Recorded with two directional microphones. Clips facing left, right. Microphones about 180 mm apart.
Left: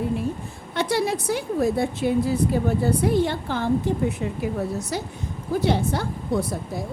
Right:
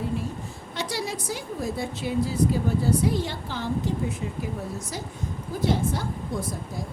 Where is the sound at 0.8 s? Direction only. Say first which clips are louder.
Left 8 dB; 60° left (ahead or behind).